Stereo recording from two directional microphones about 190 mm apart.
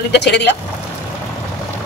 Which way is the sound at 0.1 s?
60° left (ahead or behind).